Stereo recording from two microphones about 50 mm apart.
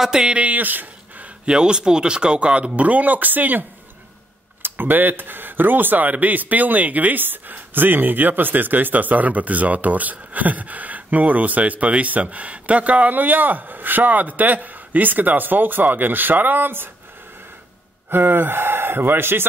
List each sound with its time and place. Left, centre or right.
0.0 s speech: centre
0.4 s speech: right
1.4 s speech: centre; by 3.6 s right
4.6 s speech: right
13.1 s speech: right
18.1 s speech: right